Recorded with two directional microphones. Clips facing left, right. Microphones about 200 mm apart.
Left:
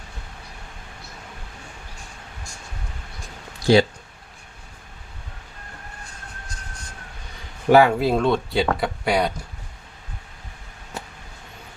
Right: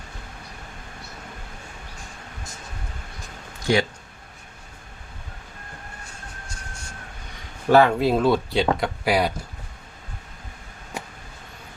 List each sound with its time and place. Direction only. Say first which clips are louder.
3.7 s speech: left 5 dB; 30° left (ahead or behind)
7.7 s speech: left 1 dB; 10° left (ahead or behind)
10.9 s vehicle: right 1 dB; 10° right (ahead or behind)